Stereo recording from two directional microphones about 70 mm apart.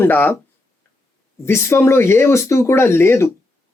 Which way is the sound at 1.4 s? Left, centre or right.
Left.